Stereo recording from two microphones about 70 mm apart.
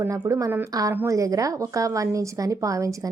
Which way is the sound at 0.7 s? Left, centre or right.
Right.